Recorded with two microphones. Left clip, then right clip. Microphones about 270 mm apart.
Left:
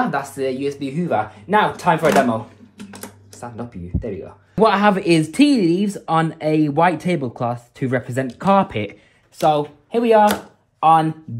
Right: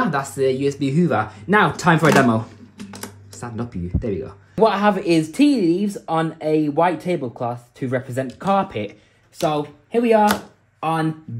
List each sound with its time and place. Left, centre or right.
0.0 s speech: right
4.6 s speech: left